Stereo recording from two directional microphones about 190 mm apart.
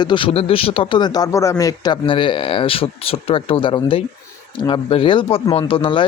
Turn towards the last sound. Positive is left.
turn(degrees=25)  # may be behind; listen again after turning